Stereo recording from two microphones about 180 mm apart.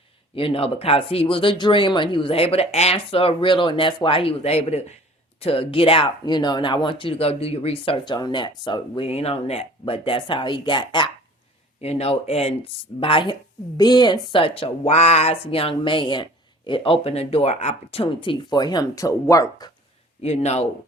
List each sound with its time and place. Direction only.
0.3 s speech: 30° left (ahead or behind)
20.2 s speech: 35° left (ahead or behind)